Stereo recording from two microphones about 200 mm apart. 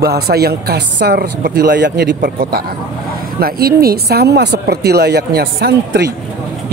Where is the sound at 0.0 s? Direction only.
50° right (ahead or behind).